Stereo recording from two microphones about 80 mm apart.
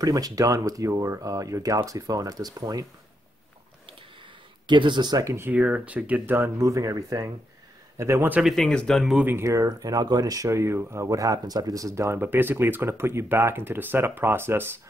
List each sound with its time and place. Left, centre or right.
0.0 s speech: right
4.6 s speech: right
5.1 s speech: right
5.4 s speech: centre
6.6 s speech: right
8.2 s speech: centre
8.5 s speech: centre
9.1 s speech: right
9.4 s speech: right
9.7 s speech: right
12.2 s speech: right